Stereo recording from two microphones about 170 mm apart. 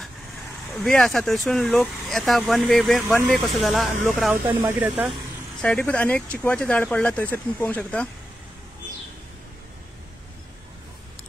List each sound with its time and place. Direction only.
0.7 s speech: centre (ahead or behind)
4.5 s speech: 10° right (ahead or behind)
5.6 s speech: 5° left (ahead or behind)